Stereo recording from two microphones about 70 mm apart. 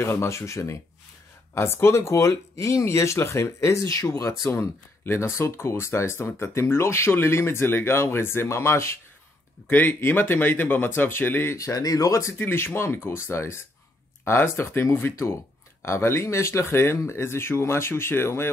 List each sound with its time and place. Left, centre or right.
0.0 s speech: left
9.7 s speech: left
11.5 s speech: left
12.4 s speech: left